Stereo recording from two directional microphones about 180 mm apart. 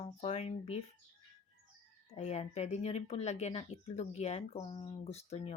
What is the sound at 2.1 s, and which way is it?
Speech, 35° left (ahead or behind).